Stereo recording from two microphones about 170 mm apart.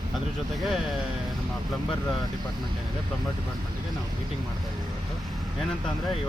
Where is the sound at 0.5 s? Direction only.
Centre (ahead or behind).